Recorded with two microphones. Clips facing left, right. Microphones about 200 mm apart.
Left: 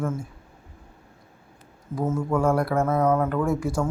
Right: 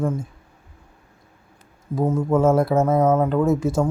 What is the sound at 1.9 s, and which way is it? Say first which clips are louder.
Speech: right 5 dB; 20° right (ahead or behind).